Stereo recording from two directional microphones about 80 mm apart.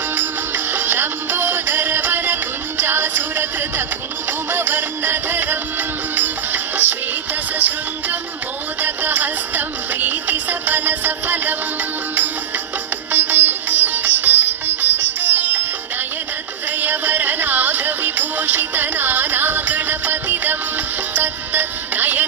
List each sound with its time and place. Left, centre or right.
0.2 s music: right
8.8 s music: right
13.1 s sitar: right
16.8 s music: right